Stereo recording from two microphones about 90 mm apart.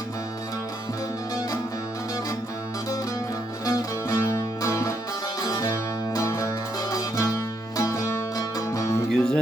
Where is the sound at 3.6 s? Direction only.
35° left (ahead or behind).